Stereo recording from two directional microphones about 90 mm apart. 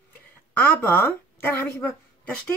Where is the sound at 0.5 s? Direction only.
25° left (ahead or behind).